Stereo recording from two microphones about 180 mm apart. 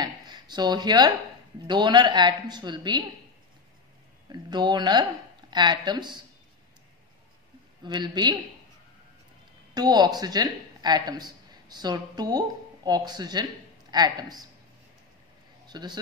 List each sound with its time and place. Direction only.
0.0 s a sound: 25° right (ahead or behind)
1.7 s speech: 25° right (ahead or behind)
4.3 s speech: 25° right (ahead or behind)
7.8 s speech: 25° right (ahead or behind)
9.8 s a woman's voice: 25° right (ahead or behind)
15.6 s a man's voice: 25° right (ahead or behind)